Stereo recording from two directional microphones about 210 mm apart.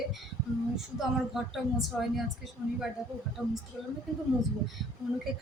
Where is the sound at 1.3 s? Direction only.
Centre (ahead or behind).